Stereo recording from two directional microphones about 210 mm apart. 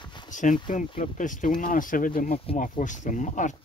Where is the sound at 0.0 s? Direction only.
20° left (ahead or behind).